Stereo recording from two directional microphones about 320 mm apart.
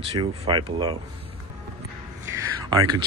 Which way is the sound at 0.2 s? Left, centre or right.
Centre.